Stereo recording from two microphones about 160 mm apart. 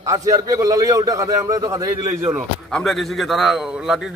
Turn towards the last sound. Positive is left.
turn(degrees=-5)  # may be behind; listen again after turning